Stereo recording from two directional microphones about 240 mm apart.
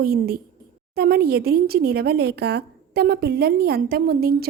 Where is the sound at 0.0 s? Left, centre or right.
Right.